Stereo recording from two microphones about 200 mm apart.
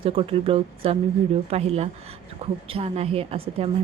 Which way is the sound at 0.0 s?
30° right (ahead or behind).